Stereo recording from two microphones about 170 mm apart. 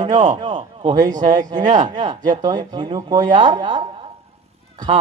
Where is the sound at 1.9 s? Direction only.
25° right (ahead or behind).